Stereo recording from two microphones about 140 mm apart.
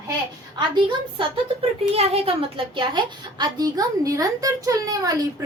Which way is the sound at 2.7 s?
30° right (ahead or behind).